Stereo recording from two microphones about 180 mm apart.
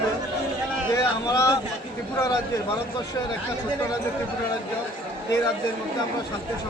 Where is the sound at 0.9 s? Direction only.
15° left (ahead or behind).